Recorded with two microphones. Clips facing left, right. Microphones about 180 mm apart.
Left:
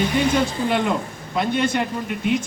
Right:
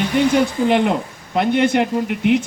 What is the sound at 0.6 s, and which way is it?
Speech, 65° right (ahead or behind).